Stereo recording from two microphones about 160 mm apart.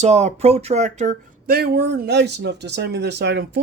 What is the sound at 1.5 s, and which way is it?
Speech, 90° right.